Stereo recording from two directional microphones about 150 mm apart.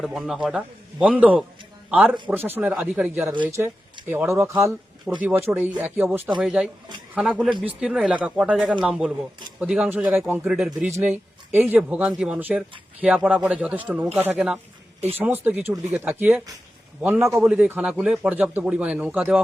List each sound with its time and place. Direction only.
0.0 s a man's voice: centre (ahead or behind)
3.4 s speech: 15° right (ahead or behind)
10.9 s speech: 15° right (ahead or behind)
17.4 s speech: 5° right (ahead or behind)